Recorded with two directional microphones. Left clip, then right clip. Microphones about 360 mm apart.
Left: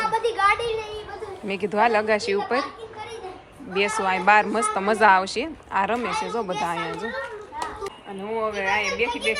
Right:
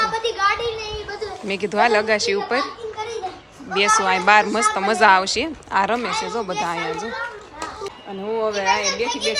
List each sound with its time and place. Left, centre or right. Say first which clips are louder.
0.1 s a sound: even; centre
1.5 s speech: right 3 dB; centre
3.8 s speech: right 6 dB; centre
8.4 s speech: right 4 dB; centre